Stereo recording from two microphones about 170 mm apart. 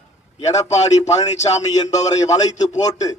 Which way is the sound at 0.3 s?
40° left (ahead or behind).